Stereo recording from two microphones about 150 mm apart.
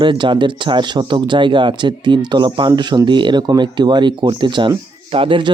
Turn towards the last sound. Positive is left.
turn(degrees=-35)  # may be behind; listen again after turning